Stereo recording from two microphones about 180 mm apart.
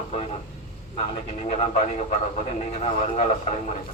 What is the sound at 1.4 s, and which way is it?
Speech, 40° left (ahead or behind).